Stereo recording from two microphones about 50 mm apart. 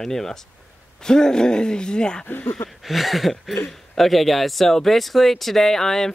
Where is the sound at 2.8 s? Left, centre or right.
Centre.